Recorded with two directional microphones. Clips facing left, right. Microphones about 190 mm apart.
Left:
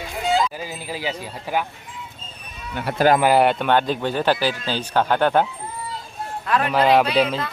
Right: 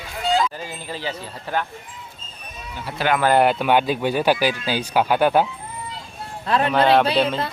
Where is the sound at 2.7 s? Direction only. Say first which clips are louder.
Left 7 dB; 65° left (ahead or behind).